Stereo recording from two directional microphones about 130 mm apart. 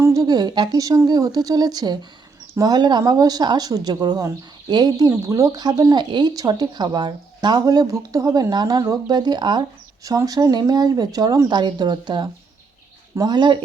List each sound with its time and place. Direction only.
0.0 s speech: 25° right (ahead or behind)